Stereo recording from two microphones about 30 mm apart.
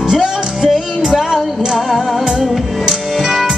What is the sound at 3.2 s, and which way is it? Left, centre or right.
Music, centre.